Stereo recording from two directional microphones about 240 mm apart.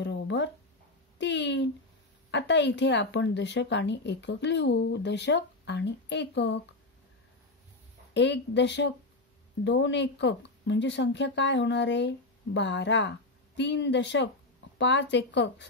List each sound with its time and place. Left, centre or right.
0.0 s a sound: left
2.3 s a woman's voice: left
8.1 s a woman's voice: left